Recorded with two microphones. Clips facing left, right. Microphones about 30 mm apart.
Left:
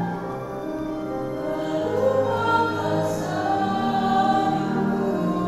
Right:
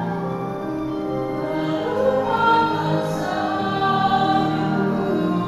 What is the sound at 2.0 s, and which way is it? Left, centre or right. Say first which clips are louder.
Music: right 3 dB; right.